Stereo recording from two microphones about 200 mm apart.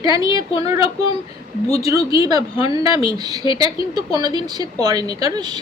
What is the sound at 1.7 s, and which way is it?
Speech, 15° right (ahead or behind).